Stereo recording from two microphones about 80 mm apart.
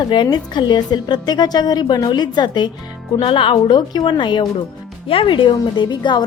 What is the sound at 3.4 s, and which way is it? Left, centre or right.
A woman's voice, left.